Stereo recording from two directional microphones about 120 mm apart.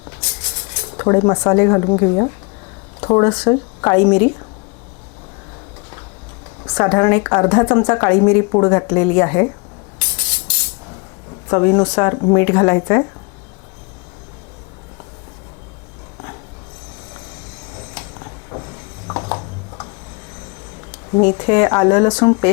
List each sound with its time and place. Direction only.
0.0 s a sound: 25° left (ahead or behind)
3.0 s a woman's voice: 25° left (ahead or behind)
6.6 s a woman's voice: 25° left (ahead or behind)
10.0 s music: 20° left (ahead or behind)
11.4 s a woman's voice: 25° left (ahead or behind)
17.7 s a sound: 25° left (ahead or behind)
21.1 s a woman's voice: 25° left (ahead or behind)